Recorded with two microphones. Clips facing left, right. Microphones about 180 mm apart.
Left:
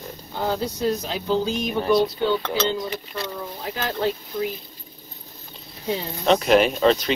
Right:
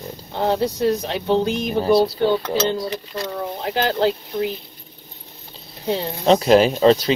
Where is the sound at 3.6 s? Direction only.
70° right (ahead or behind).